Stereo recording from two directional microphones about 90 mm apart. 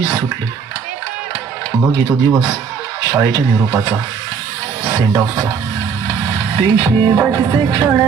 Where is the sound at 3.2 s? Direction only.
40° right (ahead or behind).